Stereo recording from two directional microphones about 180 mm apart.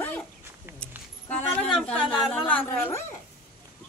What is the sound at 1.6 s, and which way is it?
Speech, 5° left (ahead or behind).